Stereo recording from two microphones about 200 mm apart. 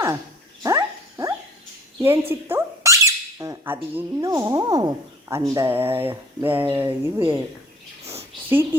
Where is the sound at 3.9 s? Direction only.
15° right (ahead or behind).